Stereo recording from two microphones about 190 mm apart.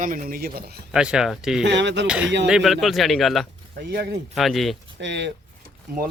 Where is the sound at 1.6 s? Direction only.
70° right (ahead or behind).